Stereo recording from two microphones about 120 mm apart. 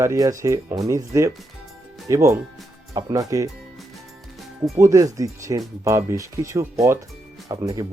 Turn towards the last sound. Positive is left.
turn(degrees=-30)  # may be behind; listen again after turning